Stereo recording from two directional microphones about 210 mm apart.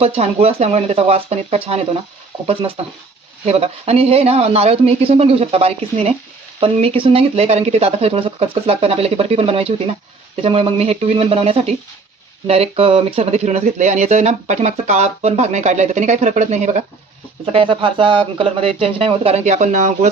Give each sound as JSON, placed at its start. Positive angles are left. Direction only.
{"t": 0.0, "sound": "speech", "side_deg": -30}